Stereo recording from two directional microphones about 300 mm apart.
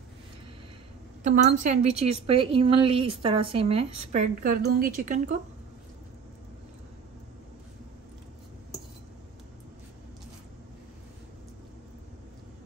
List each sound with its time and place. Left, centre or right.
1.2 s speech: right